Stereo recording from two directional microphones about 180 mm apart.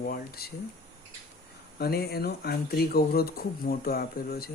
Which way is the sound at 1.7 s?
60° left (ahead or behind).